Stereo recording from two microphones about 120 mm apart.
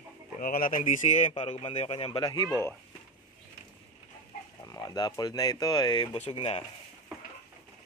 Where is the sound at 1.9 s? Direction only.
45° left (ahead or behind).